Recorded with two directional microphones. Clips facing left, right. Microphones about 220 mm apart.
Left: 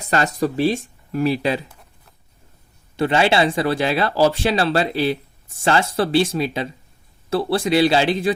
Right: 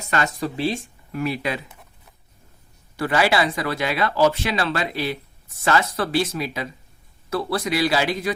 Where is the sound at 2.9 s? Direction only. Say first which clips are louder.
Left 3 dB; 25° left (ahead or behind).